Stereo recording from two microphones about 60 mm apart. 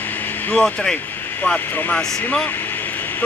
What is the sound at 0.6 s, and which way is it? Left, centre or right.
Speech, centre.